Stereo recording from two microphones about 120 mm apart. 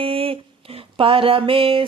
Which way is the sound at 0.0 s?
50° right (ahead or behind).